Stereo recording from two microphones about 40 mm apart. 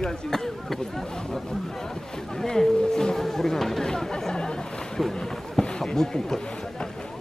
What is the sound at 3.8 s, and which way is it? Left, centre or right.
Chatter, centre.